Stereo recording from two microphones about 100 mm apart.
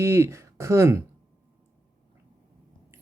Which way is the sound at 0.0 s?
25° right (ahead or behind).